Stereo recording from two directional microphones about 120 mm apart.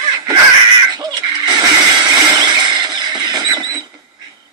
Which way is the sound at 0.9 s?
35° right (ahead or behind).